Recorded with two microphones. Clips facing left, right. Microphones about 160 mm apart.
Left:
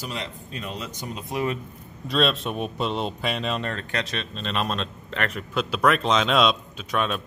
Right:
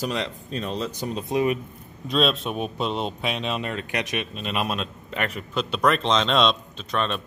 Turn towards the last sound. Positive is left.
turn(degrees=5)  # may be behind; listen again after turning